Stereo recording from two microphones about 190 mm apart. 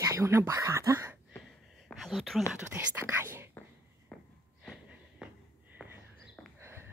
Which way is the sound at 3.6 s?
10° left (ahead or behind).